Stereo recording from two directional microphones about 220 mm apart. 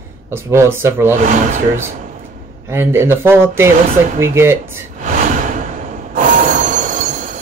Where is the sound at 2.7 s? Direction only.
10° right (ahead or behind).